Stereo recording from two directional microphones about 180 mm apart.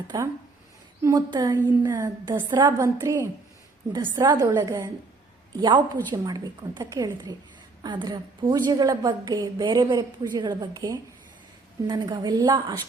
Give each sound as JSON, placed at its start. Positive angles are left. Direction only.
{"t": 0.1, "sound": "a woman's voice", "side_deg": -20}